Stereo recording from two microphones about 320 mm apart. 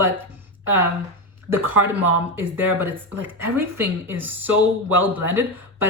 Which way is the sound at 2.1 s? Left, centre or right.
Centre.